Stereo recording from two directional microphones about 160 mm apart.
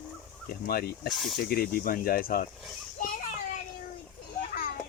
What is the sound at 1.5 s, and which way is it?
Speech, 70° left (ahead or behind).